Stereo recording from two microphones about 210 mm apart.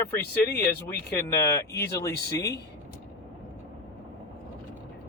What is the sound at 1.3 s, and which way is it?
Speech, 15° left (ahead or behind).